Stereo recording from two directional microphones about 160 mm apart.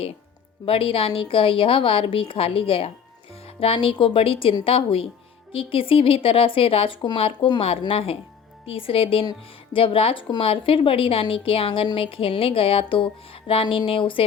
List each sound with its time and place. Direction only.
0.6 s a woman's voice: 35° left (ahead or behind)